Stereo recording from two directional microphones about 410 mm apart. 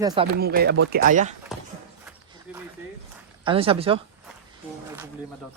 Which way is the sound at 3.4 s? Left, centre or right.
Centre.